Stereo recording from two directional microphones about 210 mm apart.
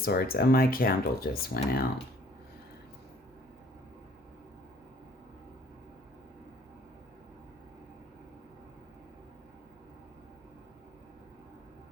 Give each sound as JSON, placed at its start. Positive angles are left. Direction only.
{"t": 0.0, "sound": "speech", "side_deg": 45}